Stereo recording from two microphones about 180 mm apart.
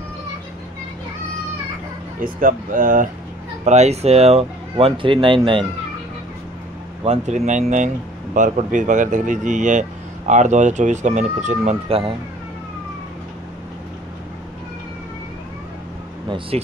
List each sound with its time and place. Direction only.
2.2 s speech: 50° right (ahead or behind); by 5.7 s 30° right (ahead or behind)
7.1 s speech: 40° right (ahead or behind)